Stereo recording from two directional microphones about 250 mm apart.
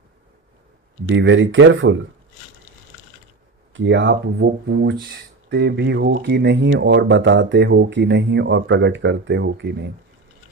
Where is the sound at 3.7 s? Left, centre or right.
Right.